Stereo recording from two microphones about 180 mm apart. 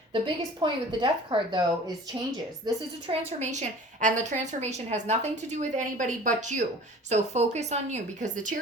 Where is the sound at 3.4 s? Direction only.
45° right (ahead or behind).